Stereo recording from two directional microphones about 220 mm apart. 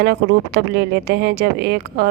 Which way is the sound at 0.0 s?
45° right (ahead or behind).